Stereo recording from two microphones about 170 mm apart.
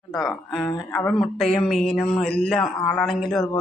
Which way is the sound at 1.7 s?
Centre (ahead or behind).